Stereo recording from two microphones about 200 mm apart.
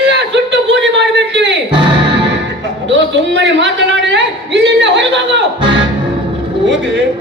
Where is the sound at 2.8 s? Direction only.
65° right (ahead or behind).